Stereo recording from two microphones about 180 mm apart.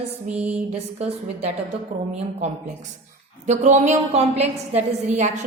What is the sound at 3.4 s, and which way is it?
A woman's voice, 40° right (ahead or behind).